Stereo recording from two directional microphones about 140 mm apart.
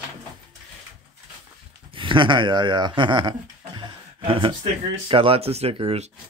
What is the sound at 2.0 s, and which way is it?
Speech, 35° right (ahead or behind).